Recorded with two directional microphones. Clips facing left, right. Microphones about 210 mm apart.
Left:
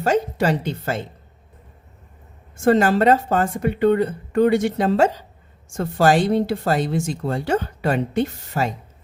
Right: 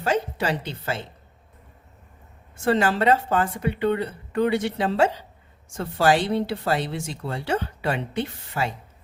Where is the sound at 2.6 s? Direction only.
45° left (ahead or behind).